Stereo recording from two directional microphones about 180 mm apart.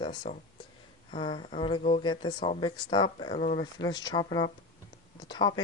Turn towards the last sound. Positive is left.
turn(degrees=25)  # may be behind; listen again after turning